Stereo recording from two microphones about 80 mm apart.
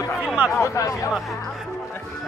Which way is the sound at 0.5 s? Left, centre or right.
Left.